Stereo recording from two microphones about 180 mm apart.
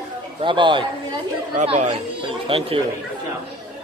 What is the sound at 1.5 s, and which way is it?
Speech, 40° right (ahead or behind).